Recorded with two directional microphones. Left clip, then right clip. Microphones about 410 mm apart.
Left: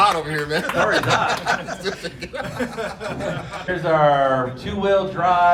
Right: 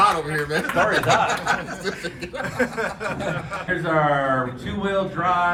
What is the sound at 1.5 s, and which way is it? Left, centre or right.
Speech, centre.